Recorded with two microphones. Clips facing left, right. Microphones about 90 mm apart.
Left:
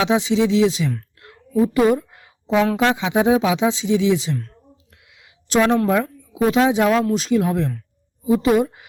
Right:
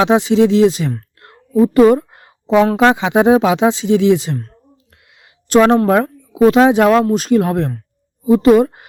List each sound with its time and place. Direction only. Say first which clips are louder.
0.0 s speech: right 6 dB; 55° right (ahead or behind)
1.2 s a sound: right 6 dB; 45° right (ahead or behind)
2.7 s speech: right 6 dB; 60° right (ahead or behind)
5.1 s a sound: right 7 dB; 50° right (ahead or behind)
5.9 s speech: right 6 dB; 60° right (ahead or behind)
7.0 s speech: right 5 dB; 50° right (ahead or behind)